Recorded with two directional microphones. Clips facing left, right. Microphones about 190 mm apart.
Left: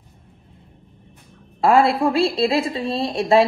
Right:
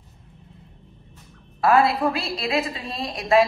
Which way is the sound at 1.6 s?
30° left (ahead or behind).